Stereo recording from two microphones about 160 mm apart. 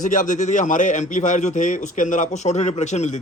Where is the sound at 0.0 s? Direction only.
55° left (ahead or behind).